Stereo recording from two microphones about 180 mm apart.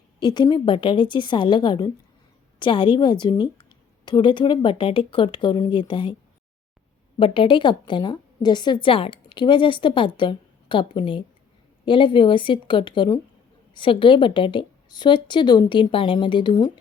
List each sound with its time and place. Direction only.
0.2 s a woman's voice: 25° left (ahead or behind)
7.2 s a woman's voice: 30° left (ahead or behind)